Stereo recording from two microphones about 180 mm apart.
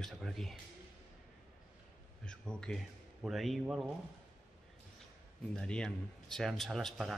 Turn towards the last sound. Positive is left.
turn(degrees=0)  # may be behind; listen again after turning